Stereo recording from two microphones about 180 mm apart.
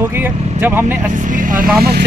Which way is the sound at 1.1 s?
45° right (ahead or behind).